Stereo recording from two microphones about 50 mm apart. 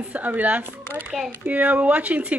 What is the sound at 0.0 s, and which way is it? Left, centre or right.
A woman's voice, right.